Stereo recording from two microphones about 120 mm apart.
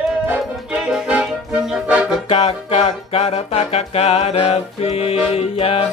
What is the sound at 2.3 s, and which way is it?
Music, 60° left (ahead or behind).